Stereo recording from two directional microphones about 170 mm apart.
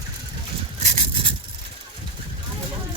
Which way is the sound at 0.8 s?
40° right (ahead or behind).